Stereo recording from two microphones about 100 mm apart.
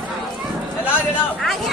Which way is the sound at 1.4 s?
Centre (ahead or behind).